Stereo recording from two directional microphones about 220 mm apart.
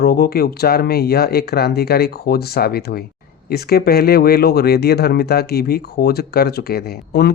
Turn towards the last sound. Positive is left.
turn(degrees=45)  # may be behind; listen again after turning